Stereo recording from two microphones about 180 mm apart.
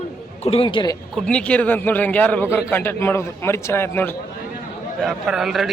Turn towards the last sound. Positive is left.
turn(degrees=0)  # may be behind; listen again after turning